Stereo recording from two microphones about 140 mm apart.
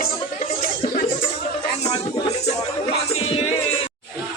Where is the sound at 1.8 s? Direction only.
50° left (ahead or behind).